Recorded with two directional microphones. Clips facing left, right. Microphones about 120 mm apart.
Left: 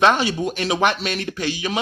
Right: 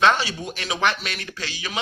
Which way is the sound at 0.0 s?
20° left (ahead or behind).